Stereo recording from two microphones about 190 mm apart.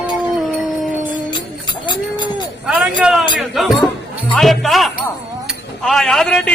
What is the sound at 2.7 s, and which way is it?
A man's voice, 5° right (ahead or behind).